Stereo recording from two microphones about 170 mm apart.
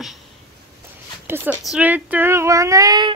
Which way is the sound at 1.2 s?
10° right (ahead or behind).